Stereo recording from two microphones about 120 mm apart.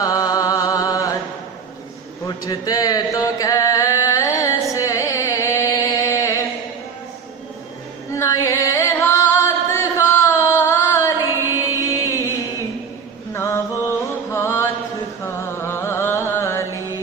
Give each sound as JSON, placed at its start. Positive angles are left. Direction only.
{"t": 0.0, "sound": "chant", "side_deg": 30}
{"t": 2.2, "sound": "chant", "side_deg": 30}
{"t": 4.7, "sound": "music", "side_deg": 25}
{"t": 8.1, "sound": "singing", "side_deg": 25}
{"t": 13.3, "sound": "mantra", "side_deg": 25}
{"t": 14.0, "sound": "music", "side_deg": 20}
{"t": 15.2, "sound": "mantra", "side_deg": 20}